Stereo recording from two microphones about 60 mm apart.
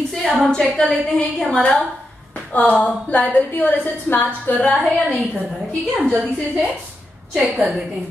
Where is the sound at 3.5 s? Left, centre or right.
Left.